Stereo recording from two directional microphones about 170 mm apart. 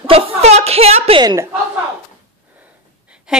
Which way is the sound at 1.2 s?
20° right (ahead or behind).